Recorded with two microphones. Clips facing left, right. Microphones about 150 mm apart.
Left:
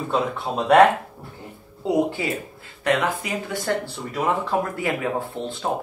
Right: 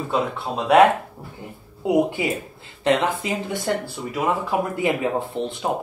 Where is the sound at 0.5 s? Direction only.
Centre (ahead or behind).